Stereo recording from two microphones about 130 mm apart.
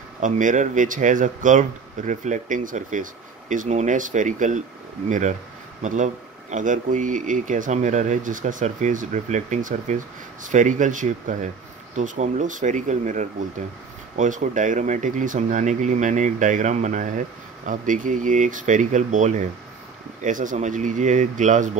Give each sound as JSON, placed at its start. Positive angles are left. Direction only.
{"t": 0.2, "sound": "speech", "side_deg": -80}
{"t": 5.8, "sound": "speech", "side_deg": -70}
{"t": 17.6, "sound": "speech", "side_deg": -90}
{"t": 20.2, "sound": "speech", "side_deg": -85}